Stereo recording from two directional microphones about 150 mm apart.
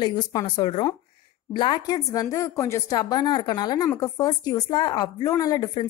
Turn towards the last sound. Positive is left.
turn(degrees=25)  # may be behind; listen again after turning